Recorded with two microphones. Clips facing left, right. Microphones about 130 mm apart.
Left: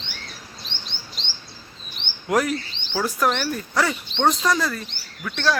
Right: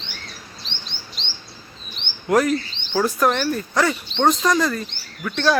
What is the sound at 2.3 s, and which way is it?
Speech, 10° left (ahead or behind).